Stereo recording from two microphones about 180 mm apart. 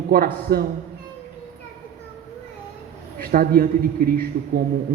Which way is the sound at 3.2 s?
55° right (ahead or behind).